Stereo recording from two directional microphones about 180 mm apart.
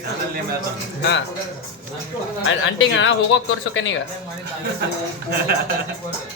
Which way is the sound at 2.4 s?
90° left.